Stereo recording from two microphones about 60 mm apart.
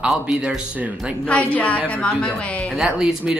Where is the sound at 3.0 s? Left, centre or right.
Centre.